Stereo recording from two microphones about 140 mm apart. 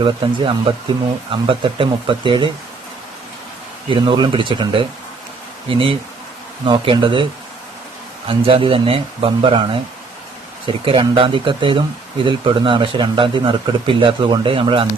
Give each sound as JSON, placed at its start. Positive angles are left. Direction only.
{"t": 0.0, "sound": "a man's voice", "side_deg": -35}
{"t": 3.8, "sound": "a man's voice", "side_deg": -35}
{"t": 8.3, "sound": "a man's voice", "side_deg": -40}